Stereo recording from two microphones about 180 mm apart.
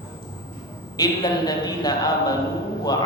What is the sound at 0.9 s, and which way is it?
Speech, 20° left (ahead or behind).